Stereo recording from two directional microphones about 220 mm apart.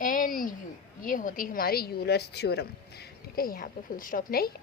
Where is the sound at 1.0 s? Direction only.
40° left (ahead or behind).